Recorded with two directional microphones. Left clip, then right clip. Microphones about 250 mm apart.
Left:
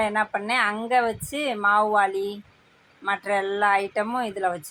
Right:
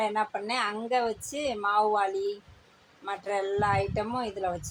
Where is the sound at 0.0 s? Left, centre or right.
Centre.